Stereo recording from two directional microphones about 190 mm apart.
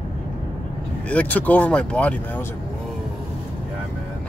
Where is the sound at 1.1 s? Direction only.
5° left (ahead or behind).